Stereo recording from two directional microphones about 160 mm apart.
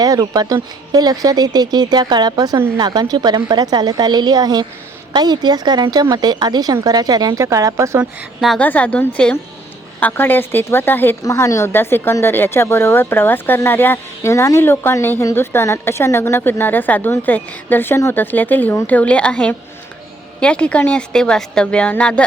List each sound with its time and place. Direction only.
0.0 s speech: 25° right (ahead or behind)
8.4 s a woman's voice: centre (ahead or behind)
8.6 s a woman's voice: 10° left (ahead or behind)